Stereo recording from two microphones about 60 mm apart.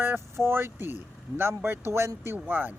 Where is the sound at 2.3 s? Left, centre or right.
Right.